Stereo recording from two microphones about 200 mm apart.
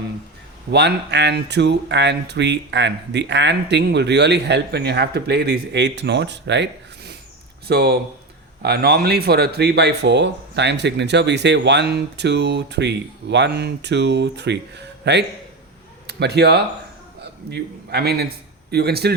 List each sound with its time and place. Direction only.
0.7 s a man's voice: 55° right (ahead or behind)